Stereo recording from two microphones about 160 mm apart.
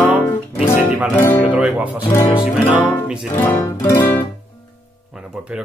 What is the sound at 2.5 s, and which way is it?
Speech, centre (ahead or behind).